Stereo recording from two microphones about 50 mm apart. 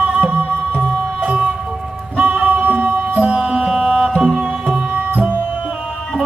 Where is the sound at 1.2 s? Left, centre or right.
Centre.